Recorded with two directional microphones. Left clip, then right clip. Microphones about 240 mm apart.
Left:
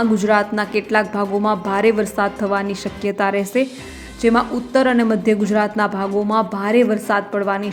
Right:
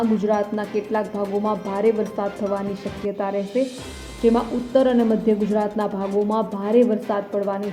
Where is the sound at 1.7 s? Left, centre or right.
Centre.